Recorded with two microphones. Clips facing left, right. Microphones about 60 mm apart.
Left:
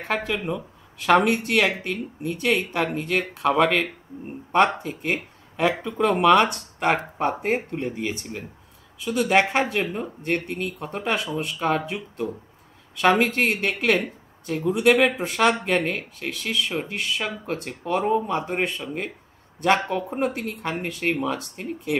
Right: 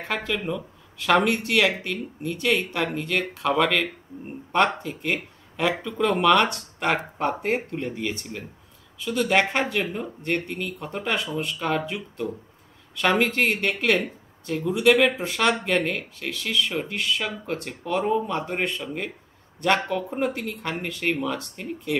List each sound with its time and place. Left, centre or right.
0.1 s speech: centre
1.1 s speech: centre
18.3 s speech: centre